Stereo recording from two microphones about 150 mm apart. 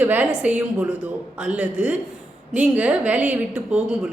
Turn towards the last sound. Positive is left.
turn(degrees=-10)  # may be behind; listen again after turning